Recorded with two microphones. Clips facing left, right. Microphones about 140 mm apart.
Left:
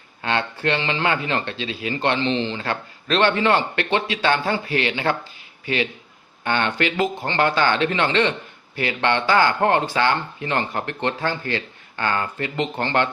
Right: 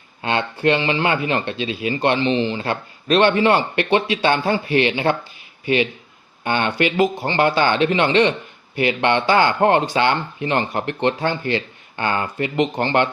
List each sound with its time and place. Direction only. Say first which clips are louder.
0.2 s speech: right 2 dB; 20° right (ahead or behind)